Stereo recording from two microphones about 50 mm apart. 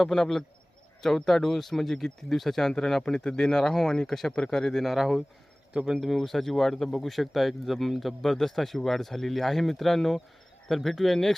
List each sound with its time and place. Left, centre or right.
0.0 s speech: centre
5.7 s speech: centre
6.0 s speech: centre